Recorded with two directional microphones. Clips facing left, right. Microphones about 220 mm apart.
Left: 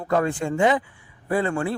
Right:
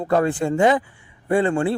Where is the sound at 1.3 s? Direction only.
25° right (ahead or behind).